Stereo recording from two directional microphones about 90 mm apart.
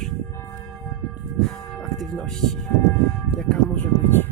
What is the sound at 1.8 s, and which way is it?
Speech, 5° left (ahead or behind).